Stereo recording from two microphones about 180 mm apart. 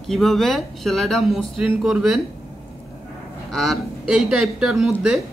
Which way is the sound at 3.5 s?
Centre (ahead or behind).